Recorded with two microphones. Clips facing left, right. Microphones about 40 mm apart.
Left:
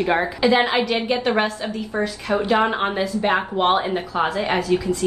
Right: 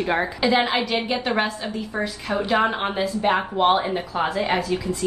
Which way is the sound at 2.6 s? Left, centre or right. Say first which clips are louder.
Left 2 dB; centre.